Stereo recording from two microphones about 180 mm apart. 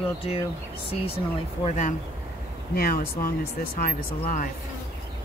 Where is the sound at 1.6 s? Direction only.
40° left (ahead or behind).